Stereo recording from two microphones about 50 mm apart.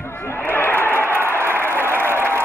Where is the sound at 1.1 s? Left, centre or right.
Right.